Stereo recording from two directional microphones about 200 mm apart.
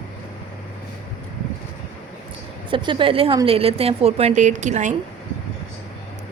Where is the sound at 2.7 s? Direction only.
25° right (ahead or behind).